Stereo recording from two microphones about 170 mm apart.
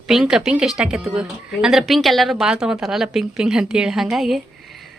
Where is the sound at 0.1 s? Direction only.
5° right (ahead or behind).